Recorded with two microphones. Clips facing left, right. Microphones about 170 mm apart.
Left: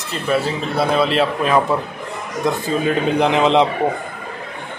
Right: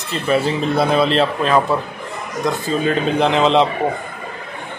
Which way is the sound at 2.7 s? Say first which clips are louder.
Right 1 dB; 15° left (ahead or behind).